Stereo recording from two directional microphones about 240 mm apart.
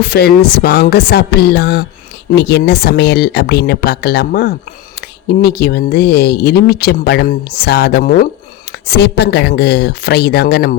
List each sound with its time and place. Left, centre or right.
0.0 s speech: left